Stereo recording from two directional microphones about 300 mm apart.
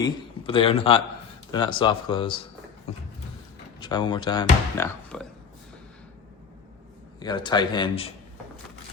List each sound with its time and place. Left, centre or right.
0.0 s a man's voice: centre
3.8 s speech: centre
5.1 s speech: centre
7.2 s speech: centre